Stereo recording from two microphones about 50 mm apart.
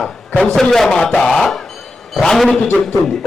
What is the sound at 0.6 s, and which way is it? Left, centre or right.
Speech, centre.